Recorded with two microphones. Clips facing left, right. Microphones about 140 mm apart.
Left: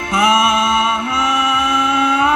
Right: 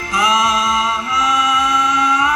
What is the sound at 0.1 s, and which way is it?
Music, 55° left (ahead or behind).